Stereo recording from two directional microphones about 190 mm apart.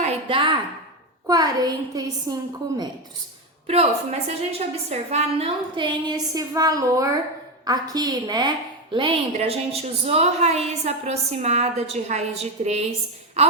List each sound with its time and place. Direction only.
0.0 s a sound: 30° right (ahead or behind)
1.3 s a woman's voice: 20° right (ahead or behind)
4.5 s a woman's voice: 35° right (ahead or behind)